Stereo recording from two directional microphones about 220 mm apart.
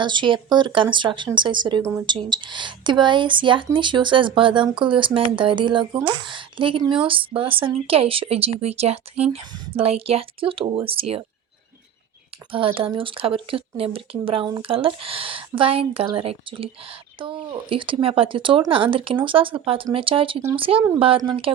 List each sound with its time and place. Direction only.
0.0 s speech: 20° right (ahead or behind)
12.5 s speech: 25° right (ahead or behind)